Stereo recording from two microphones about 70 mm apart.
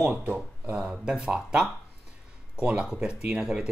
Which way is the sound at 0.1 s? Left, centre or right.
Right.